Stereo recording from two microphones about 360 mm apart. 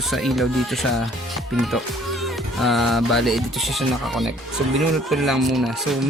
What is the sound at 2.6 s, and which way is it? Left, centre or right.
Speech, centre.